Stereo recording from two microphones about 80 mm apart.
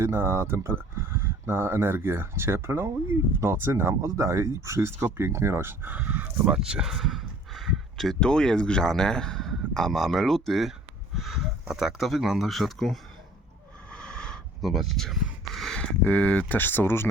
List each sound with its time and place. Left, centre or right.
0.0 s speech: right
6.5 s speech: centre
13.9 s wheeze: centre
14.6 s speech: centre; by 17.1 s left